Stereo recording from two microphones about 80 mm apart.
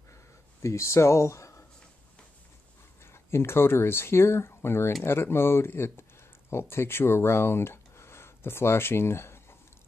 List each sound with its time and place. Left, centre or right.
0.6 s speech: left
3.1 s speech: left